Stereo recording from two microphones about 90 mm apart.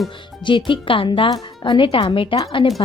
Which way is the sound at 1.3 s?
55° left (ahead or behind).